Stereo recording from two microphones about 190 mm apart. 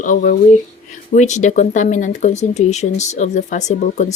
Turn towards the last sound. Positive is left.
turn(degrees=40)  # may be behind; listen again after turning